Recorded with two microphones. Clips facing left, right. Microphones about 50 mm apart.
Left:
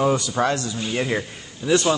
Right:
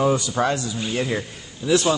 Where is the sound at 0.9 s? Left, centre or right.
Centre.